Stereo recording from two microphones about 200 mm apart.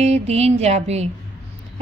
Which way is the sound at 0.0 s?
30° right (ahead or behind).